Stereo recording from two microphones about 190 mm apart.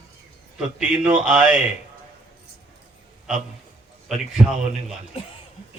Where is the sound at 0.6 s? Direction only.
5° right (ahead or behind).